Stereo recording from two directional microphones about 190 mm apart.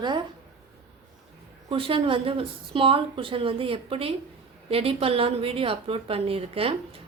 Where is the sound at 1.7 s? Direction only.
30° right (ahead or behind).